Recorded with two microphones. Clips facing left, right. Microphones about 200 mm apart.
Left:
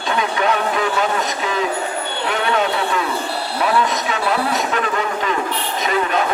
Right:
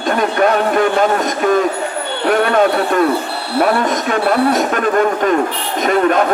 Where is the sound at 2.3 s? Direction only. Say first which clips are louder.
Right 7 dB; 50° right (ahead or behind).